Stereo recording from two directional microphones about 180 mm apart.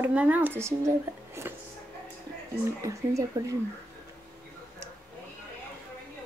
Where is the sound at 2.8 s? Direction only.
15° right (ahead or behind).